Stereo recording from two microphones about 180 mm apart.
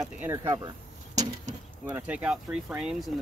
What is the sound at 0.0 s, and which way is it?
Speech, 10° right (ahead or behind).